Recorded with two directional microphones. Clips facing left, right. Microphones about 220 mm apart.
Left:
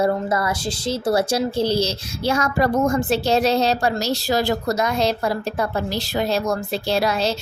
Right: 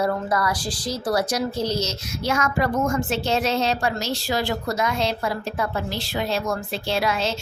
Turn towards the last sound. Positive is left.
turn(degrees=40)  # may be behind; listen again after turning